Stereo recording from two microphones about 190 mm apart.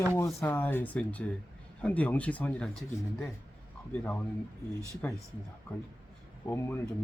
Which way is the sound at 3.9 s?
10° left (ahead or behind).